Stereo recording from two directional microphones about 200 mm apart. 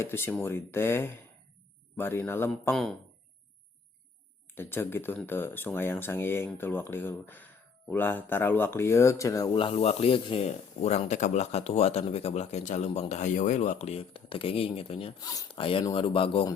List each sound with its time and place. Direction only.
0.0 s speech: 10° left (ahead or behind)
4.5 s speech: 10° left (ahead or behind); by 16.6 s 25° left (ahead or behind)